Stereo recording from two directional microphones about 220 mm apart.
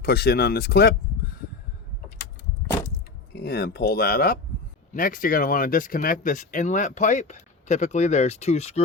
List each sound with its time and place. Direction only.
0.0 s speech: 45° left (ahead or behind)
3.3 s speech: 45° left (ahead or behind); by 8.8 s 30° left (ahead or behind)